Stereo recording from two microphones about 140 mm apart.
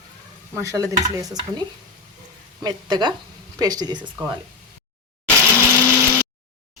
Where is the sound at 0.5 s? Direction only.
25° right (ahead or behind).